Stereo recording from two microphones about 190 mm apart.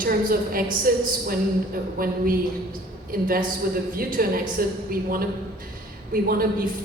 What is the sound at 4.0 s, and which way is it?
A woman's voice, 50° right (ahead or behind).